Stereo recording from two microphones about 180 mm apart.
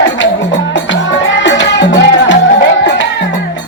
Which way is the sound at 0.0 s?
90° left.